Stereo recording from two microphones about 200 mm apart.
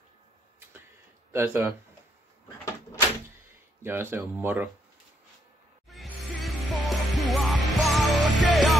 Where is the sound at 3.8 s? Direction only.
10° right (ahead or behind).